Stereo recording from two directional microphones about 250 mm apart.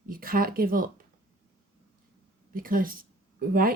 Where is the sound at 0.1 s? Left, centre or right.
Right.